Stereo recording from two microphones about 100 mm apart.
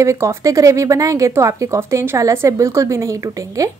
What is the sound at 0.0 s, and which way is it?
A woman's voice, 30° right (ahead or behind).